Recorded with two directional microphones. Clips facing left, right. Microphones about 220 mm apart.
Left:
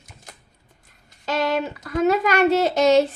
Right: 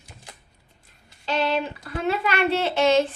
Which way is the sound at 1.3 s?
45° left (ahead or behind).